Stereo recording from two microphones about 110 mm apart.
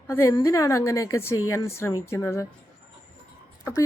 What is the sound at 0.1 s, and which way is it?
A woman's voice, 25° left (ahead or behind).